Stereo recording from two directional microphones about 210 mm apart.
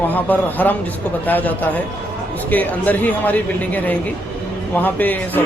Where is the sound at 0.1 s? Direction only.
10° left (ahead or behind).